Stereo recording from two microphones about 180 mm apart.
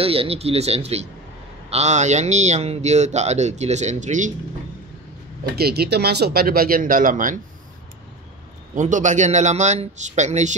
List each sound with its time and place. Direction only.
0.0 s speech: 30° right (ahead or behind)
5.6 s speech: 60° right (ahead or behind)
8.7 s speech: 45° right (ahead or behind)